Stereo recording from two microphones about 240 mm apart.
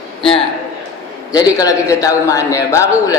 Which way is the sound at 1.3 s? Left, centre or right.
Centre.